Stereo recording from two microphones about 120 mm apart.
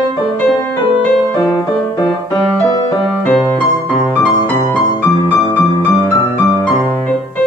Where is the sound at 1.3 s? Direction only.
25° left (ahead or behind).